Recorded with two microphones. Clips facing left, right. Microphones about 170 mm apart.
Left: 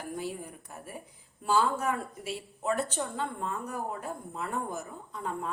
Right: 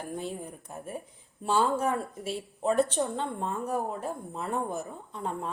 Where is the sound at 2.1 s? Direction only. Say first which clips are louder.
Right 3 dB; centre (ahead or behind).